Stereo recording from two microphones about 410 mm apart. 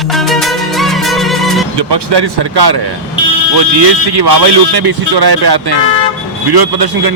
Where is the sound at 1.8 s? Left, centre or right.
Right.